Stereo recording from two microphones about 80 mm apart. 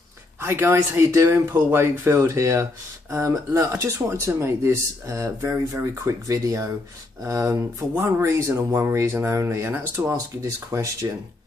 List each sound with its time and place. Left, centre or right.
0.4 s speech: right
9.7 s speech: right
10.4 s speech: right